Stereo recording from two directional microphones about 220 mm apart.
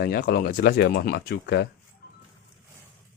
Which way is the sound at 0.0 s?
45° left (ahead or behind).